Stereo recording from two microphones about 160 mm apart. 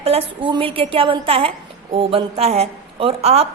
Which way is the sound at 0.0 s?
35° right (ahead or behind).